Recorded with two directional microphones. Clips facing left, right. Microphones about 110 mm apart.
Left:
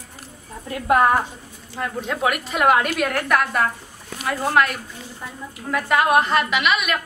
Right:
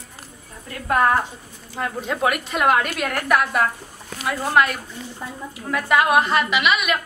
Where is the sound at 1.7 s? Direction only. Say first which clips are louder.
Even; 5° right (ahead or behind).